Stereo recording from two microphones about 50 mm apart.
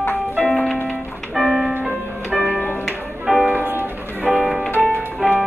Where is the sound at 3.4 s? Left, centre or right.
Right.